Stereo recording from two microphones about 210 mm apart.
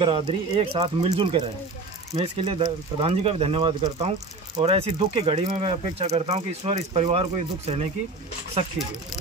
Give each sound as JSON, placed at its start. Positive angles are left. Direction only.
{"t": 0.0, "sound": "speech", "side_deg": -25}